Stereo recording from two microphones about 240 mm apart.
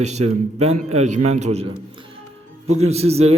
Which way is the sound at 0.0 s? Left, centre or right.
Right.